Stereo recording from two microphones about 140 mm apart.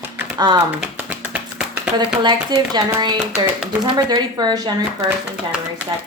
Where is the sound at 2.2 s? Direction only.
30° right (ahead or behind).